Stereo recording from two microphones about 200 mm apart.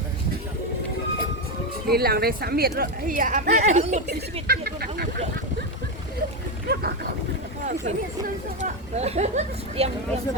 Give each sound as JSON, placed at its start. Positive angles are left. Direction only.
{"t": 1.9, "sound": "speech", "side_deg": -50}
{"t": 4.4, "sound": "a sound", "side_deg": -50}
{"t": 6.7, "sound": "speech", "side_deg": -50}
{"t": 7.6, "sound": "vehicle", "side_deg": -40}
{"t": 8.6, "sound": "speech", "side_deg": -35}